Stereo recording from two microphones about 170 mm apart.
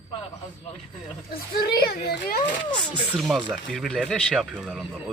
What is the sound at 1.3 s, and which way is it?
A child's voice, 65° left (ahead or behind).